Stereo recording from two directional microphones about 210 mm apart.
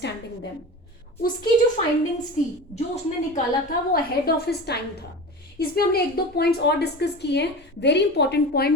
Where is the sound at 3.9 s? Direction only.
45° left (ahead or behind).